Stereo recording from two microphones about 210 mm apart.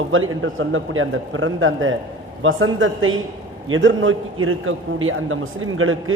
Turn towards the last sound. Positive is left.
turn(degrees=-80)